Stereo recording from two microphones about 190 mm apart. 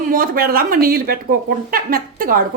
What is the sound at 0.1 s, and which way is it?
Speech, 50° right (ahead or behind).